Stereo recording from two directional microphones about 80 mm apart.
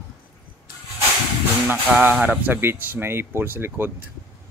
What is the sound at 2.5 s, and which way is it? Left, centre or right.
Speech, right.